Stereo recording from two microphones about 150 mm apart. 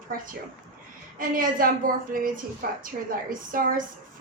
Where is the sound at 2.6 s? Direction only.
90° right.